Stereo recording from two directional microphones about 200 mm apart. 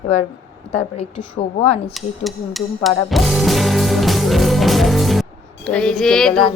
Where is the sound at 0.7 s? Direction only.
30° left (ahead or behind).